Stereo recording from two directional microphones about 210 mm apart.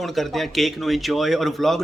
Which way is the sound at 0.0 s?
Centre (ahead or behind).